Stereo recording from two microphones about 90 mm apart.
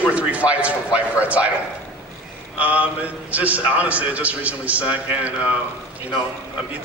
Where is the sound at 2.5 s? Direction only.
15° right (ahead or behind).